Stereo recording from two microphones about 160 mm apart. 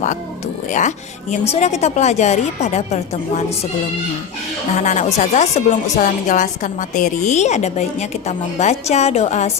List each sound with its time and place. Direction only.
0.7 s a woman's voice: 50° left (ahead or behind)
4.7 s a woman's voice: 50° left (ahead or behind)